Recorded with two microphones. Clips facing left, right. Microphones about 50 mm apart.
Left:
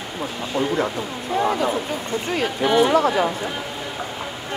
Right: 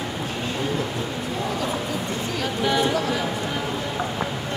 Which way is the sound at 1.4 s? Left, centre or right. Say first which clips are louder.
Left 7 dB; left.